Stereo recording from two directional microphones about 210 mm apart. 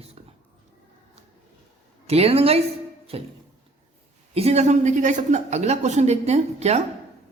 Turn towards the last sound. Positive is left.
turn(degrees=-30)  # may be behind; listen again after turning